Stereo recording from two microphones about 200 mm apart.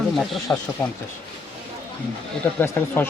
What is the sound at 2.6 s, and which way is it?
Speech, 10° left (ahead or behind).